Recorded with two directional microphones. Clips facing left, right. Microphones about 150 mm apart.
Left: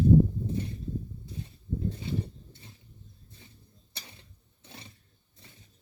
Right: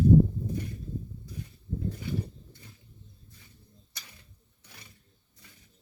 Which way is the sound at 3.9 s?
25° left (ahead or behind).